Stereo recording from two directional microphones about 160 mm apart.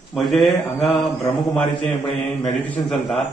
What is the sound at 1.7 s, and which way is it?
Speech, 30° left (ahead or behind).